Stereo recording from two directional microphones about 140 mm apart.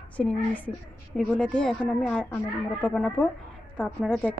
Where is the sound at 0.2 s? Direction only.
10° left (ahead or behind).